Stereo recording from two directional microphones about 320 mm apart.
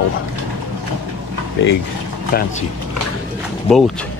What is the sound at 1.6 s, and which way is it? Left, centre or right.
Speech, left.